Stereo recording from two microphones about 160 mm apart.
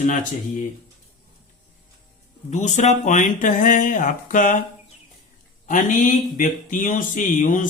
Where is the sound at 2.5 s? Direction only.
45° left (ahead or behind).